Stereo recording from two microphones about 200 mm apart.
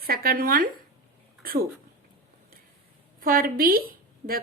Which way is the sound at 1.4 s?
50° right (ahead or behind).